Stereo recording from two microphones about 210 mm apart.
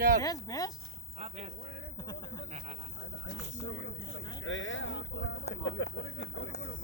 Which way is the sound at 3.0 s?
60° left (ahead or behind).